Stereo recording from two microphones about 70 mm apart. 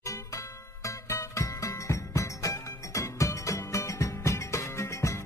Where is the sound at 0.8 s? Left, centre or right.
Left.